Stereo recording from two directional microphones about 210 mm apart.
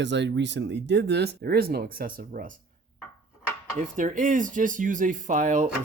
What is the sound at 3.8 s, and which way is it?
Speech, 35° right (ahead or behind).